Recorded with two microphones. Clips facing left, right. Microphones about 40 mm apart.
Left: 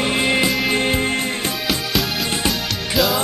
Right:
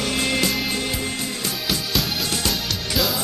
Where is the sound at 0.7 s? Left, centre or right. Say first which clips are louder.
Left 7 dB; left.